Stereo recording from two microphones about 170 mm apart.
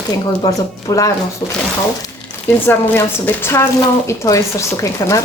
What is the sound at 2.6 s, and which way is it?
A woman's voice, 15° left (ahead or behind).